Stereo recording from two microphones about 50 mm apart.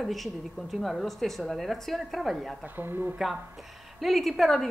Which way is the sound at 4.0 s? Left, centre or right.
Centre.